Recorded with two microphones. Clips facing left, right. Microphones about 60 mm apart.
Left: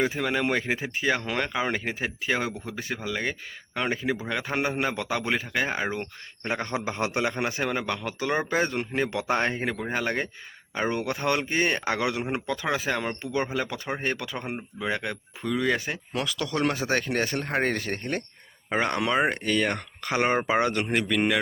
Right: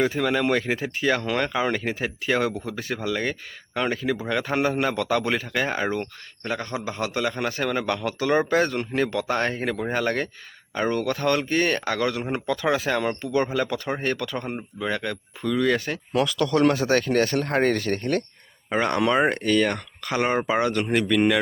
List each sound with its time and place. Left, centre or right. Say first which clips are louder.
0.0 s speech: right 3 dB; centre
6.4 s speech: even; left; by 19.7 s centre
19.7 s speech: right 1 dB; left
20.8 s speech: right 4 dB; centre